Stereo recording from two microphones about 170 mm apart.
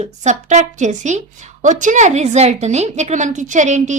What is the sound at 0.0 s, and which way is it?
A woman's voice, 45° right (ahead or behind).